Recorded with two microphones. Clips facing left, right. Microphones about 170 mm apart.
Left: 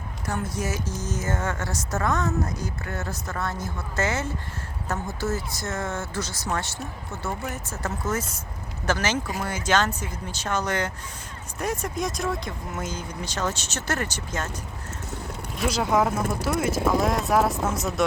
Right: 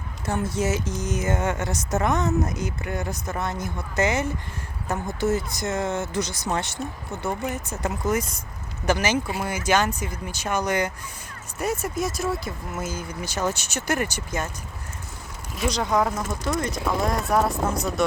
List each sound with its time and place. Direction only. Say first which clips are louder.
0.3 s speech: right 4 dB; 25° right (ahead or behind)
15.5 s speech: even; 5° left (ahead or behind)